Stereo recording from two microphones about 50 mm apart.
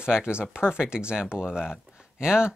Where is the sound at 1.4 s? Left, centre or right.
Centre.